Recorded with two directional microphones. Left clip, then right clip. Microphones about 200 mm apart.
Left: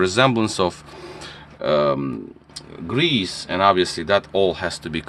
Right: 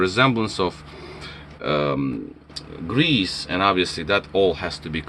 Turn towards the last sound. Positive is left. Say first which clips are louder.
# left 2 dB
turn(degrees=55)  # may be behind; listen again after turning